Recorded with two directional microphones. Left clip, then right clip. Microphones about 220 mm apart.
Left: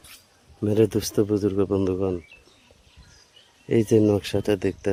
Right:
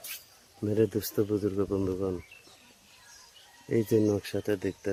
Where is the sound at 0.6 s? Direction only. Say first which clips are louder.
Left 6 dB; 45° left (ahead or behind).